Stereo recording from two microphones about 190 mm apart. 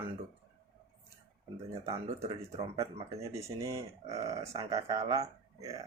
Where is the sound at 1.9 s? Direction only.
30° right (ahead or behind).